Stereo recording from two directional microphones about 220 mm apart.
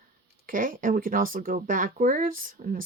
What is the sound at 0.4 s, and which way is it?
Speech, 40° right (ahead or behind).